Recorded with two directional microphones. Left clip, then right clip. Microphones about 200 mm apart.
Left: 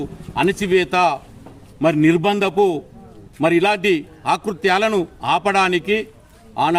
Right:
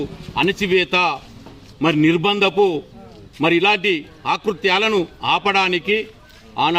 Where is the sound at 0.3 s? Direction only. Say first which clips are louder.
Even; 20° left (ahead or behind).